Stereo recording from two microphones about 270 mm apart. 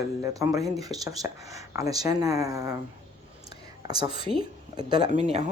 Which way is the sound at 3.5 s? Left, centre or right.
Centre.